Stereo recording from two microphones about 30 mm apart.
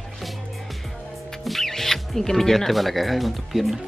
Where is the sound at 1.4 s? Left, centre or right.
Centre.